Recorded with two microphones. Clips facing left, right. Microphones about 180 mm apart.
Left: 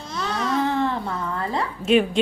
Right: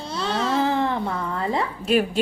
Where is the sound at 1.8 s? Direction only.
Centre (ahead or behind).